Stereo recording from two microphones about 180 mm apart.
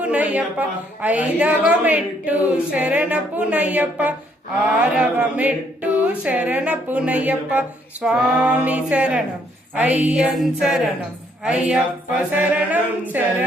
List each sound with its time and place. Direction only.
0.0 s a woman's voice: 5° right (ahead or behind)